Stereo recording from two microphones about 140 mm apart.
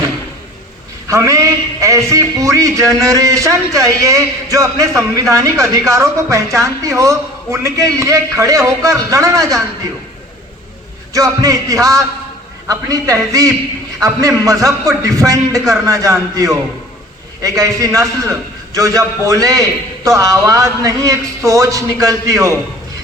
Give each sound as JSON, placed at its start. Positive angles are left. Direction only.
{"t": 1.0, "sound": "a woman's voice", "side_deg": -20}
{"t": 11.1, "sound": "a woman's voice", "side_deg": -25}